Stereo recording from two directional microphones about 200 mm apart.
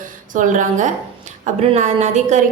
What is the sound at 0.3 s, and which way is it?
Music, 40° right (ahead or behind).